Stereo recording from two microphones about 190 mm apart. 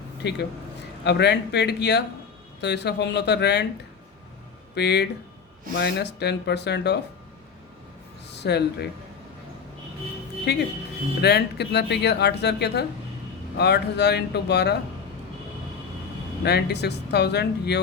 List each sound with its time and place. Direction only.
0.2 s speech: 65° left (ahead or behind)
4.7 s speech: 60° left (ahead or behind)
8.3 s speech: 60° left (ahead or behind)
10.4 s speech: 60° left (ahead or behind)
16.4 s speech: 60° left (ahead or behind)